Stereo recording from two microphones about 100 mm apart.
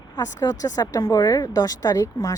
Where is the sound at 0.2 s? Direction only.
35° left (ahead or behind).